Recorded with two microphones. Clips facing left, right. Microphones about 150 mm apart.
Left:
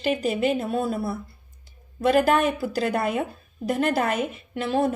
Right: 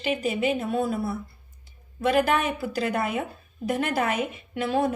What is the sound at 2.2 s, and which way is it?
A woman's voice, 40° left (ahead or behind).